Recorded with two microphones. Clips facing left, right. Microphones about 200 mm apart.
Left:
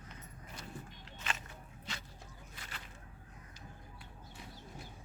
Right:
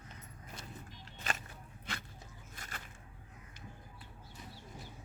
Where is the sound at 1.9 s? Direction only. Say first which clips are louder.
Right 3 dB; 55° right (ahead or behind).